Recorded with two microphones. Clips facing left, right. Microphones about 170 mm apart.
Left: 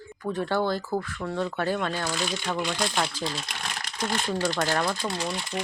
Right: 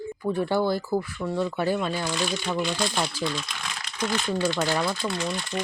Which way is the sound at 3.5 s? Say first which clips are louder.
Left 1 dB; 50° left (ahead or behind).